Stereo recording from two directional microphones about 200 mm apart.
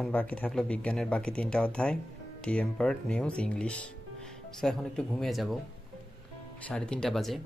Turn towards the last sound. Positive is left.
turn(degrees=0)  # may be behind; listen again after turning